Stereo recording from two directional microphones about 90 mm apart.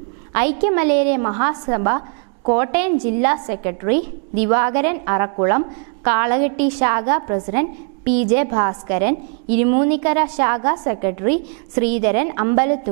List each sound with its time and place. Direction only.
0.3 s a woman's voice: 15° right (ahead or behind)